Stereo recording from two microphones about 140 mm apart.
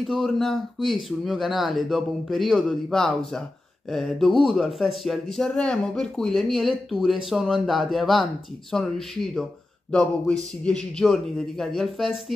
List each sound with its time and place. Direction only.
0.0 s speech: centre (ahead or behind)